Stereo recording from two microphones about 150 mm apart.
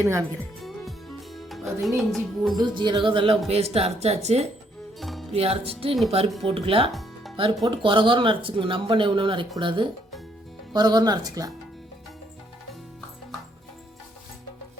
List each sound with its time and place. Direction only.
0.0 s speech: 20° right (ahead or behind)
0.6 s music: centre (ahead or behind)
2.0 s speech: centre (ahead or behind)
2.6 s speech: 30° right (ahead or behind); by 4.4 s 45° right (ahead or behind)
4.9 s music: centre (ahead or behind)
5.3 s speech: 40° right (ahead or behind); by 11.5 s 25° right (ahead or behind)